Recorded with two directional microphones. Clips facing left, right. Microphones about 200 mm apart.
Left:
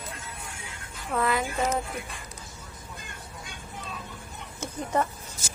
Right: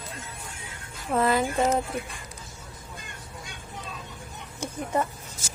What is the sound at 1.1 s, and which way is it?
Speech, 30° right (ahead or behind).